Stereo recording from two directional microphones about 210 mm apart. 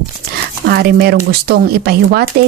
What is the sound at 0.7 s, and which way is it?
Speech, 50° right (ahead or behind).